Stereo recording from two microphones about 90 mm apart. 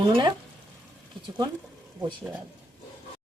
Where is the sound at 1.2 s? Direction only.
55° right (ahead or behind).